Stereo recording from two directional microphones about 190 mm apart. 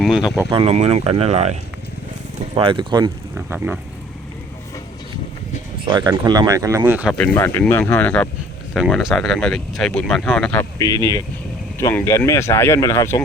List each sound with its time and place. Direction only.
0.0 s speech: centre (ahead or behind)
0.5 s speech: 35° right (ahead or behind)
2.6 s speech: 25° right (ahead or behind)
3.3 s speech: 10° right (ahead or behind)
5.9 s speech: 20° right (ahead or behind)
7.1 s speech: centre (ahead or behind)
7.3 s speech: 10° left (ahead or behind)